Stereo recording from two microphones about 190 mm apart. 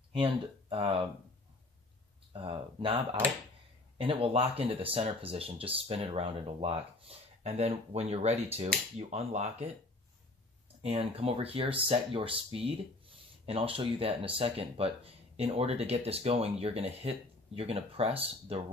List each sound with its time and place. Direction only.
0.1 s speech: 25° right (ahead or behind)
2.3 s speech: 25° right (ahead or behind)
10.8 s speech: 30° right (ahead or behind)